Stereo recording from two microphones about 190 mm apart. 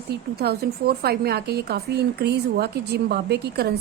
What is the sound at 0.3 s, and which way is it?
Speech, 55° right (ahead or behind).